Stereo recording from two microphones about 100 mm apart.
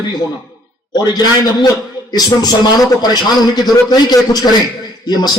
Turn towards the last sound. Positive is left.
turn(degrees=40)  # may be behind; listen again after turning